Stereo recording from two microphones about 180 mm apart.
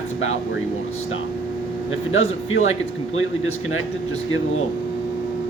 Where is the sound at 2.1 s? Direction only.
90° left.